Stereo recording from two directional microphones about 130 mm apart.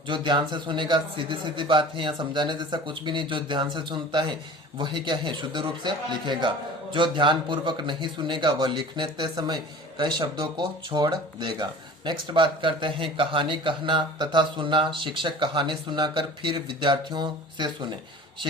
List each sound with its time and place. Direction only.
0.1 s speech: 40° right (ahead or behind)